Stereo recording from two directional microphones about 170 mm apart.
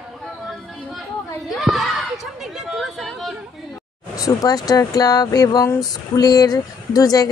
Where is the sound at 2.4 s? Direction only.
Centre (ahead or behind).